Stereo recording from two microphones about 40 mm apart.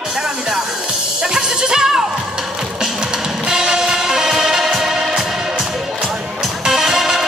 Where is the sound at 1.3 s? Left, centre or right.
Centre.